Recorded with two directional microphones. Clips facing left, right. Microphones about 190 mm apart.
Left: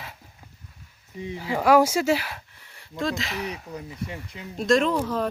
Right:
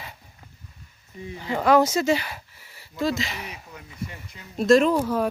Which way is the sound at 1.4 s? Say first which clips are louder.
Even; 5° left (ahead or behind).